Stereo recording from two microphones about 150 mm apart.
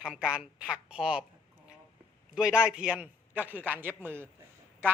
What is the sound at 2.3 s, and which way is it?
A man's voice, 5° right (ahead or behind).